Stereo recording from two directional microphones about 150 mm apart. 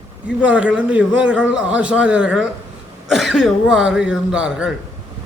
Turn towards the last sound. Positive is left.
turn(degrees=-5)  # may be behind; listen again after turning